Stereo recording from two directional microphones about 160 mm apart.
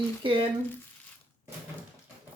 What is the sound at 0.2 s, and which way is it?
Speech, 30° right (ahead or behind).